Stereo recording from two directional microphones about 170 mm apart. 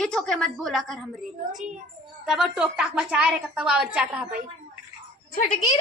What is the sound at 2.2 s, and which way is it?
A woman's voice, 5° right (ahead or behind).